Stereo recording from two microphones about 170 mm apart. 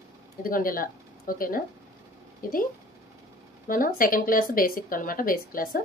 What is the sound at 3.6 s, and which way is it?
Speech, 55° left (ahead or behind).